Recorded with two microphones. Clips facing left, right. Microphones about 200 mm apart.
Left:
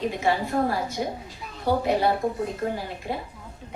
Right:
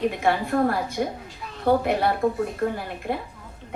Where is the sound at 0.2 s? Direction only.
55° right (ahead or behind).